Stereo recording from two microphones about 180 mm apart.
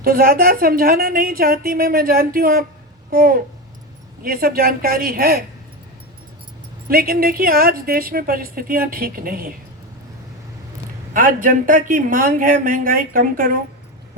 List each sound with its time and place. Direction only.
0.0 s a woman's voice: 55° right (ahead or behind)
6.8 s a woman's voice: 55° right (ahead or behind)
11.1 s speech: 50° right (ahead or behind)